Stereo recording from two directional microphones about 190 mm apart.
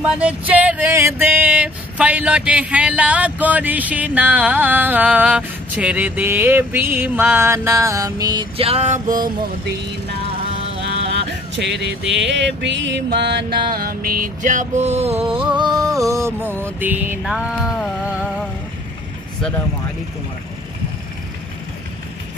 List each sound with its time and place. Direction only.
0.2 s music: 5° right (ahead or behind); by 9.8 s 45° right (ahead or behind)
10.8 s music: 65° right (ahead or behind)
13.7 s music: 50° right (ahead or behind); by 17.8 s centre (ahead or behind)